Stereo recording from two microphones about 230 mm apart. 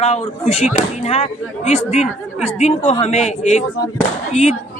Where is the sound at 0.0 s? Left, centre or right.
Left.